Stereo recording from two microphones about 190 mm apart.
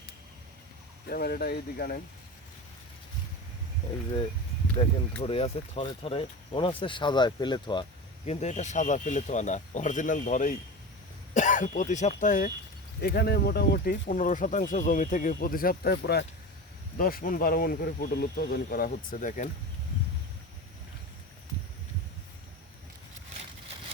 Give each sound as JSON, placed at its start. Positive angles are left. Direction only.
{"t": 1.1, "sound": "speech", "side_deg": 50}
{"t": 5.2, "sound": "speech", "side_deg": 30}
{"t": 8.3, "sound": "speech", "side_deg": 35}
{"t": 13.0, "sound": "speech", "side_deg": 55}